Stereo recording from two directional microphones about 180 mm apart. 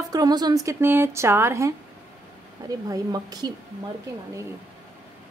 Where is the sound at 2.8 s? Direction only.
20° right (ahead or behind).